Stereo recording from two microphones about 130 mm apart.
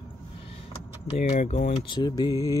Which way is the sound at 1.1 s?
60° left (ahead or behind).